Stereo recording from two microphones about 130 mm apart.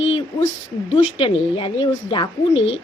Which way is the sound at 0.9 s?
45° left (ahead or behind).